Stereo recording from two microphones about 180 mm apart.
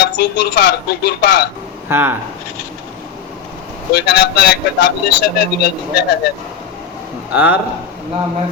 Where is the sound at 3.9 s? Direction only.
75° left (ahead or behind).